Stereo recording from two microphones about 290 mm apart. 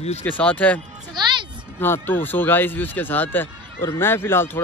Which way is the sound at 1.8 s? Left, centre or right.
Centre.